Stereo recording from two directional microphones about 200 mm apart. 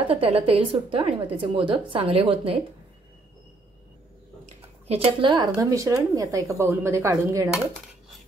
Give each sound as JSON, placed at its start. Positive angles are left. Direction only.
{"t": 0.1, "sound": "a woman's voice", "side_deg": -30}
{"t": 4.8, "sound": "speech", "side_deg": -25}